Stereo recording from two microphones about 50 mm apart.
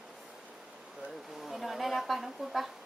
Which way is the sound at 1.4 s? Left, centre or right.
Centre.